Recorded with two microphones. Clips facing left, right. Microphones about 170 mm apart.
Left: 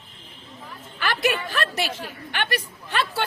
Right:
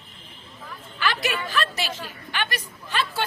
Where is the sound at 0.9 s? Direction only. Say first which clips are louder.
Left 2 dB; 55° left (ahead or behind).